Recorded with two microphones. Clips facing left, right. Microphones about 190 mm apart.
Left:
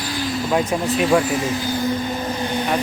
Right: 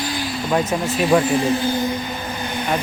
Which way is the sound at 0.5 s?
15° left (ahead or behind).